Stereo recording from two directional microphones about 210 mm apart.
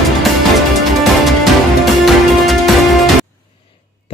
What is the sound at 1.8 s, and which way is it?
Music, centre (ahead or behind).